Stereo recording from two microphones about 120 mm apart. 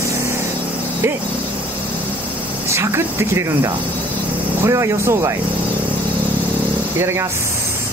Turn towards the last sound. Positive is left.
turn(degrees=-20)  # may be behind; listen again after turning